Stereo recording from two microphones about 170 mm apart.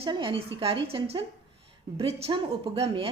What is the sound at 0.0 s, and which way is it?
A woman's voice, 30° right (ahead or behind).